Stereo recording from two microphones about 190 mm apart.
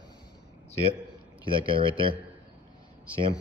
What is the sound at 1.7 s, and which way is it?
Speech, 25° right (ahead or behind).